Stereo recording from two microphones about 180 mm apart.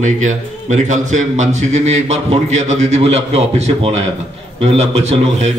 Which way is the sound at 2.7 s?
35° right (ahead or behind).